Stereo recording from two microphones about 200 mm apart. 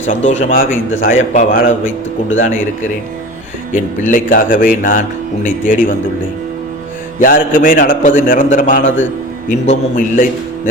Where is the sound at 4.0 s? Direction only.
40° left (ahead or behind).